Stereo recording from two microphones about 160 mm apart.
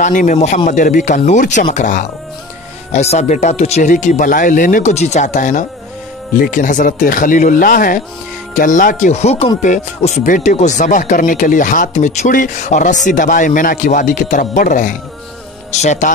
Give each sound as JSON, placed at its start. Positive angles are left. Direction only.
{"t": 0.0, "sound": "speech", "side_deg": 55}
{"t": 15.7, "sound": "speech", "side_deg": 45}